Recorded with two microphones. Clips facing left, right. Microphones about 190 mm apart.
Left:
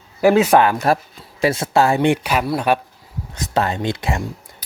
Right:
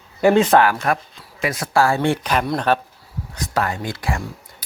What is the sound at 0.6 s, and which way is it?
Speech, 20° left (ahead or behind).